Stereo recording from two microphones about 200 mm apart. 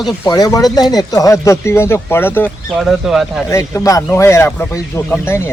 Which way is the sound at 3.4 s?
15° left (ahead or behind).